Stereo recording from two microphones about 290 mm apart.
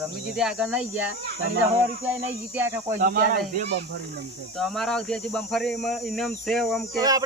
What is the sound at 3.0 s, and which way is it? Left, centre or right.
Speech, right.